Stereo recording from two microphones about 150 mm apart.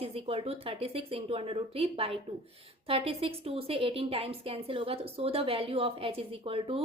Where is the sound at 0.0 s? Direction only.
40° right (ahead or behind).